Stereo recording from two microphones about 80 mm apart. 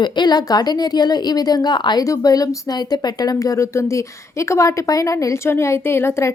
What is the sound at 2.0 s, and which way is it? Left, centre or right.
Speech, left.